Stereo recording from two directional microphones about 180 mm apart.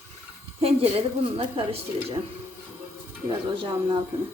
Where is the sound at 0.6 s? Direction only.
35° right (ahead or behind).